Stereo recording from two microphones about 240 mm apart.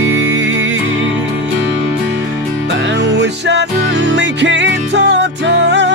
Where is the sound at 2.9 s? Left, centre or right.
Right.